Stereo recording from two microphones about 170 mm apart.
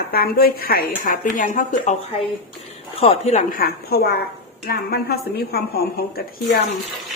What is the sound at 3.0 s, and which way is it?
Speech, 40° left (ahead or behind).